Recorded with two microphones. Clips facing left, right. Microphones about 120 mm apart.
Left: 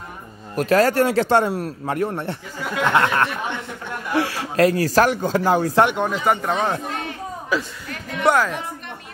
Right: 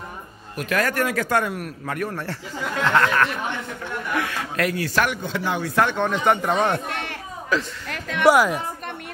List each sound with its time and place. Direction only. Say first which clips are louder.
0.6 s speech: left 7 dB; 35° left (ahead or behind)
5.9 s speech: even; 10° left (ahead or behind)
6.9 s chatter: left 2 dB; 70° right (ahead or behind)
7.5 s speech: even; 10° left (ahead or behind)
7.9 s music: right 2 dB; 90° right
8.3 s a woman's voice: right 2 dB; 10° right (ahead or behind)